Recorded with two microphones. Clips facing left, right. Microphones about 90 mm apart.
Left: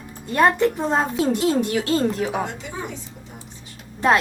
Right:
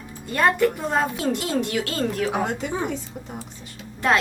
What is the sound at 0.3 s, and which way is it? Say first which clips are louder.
A woman's voice: left 2 dB; 20° left (ahead or behind).